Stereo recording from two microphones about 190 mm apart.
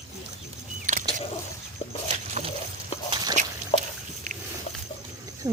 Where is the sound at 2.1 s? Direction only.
40° right (ahead or behind).